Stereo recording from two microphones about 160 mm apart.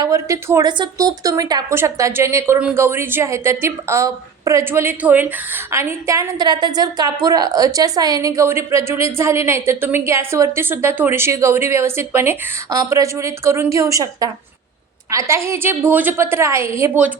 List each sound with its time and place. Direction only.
0.0 s a woman's voice: 20° right (ahead or behind)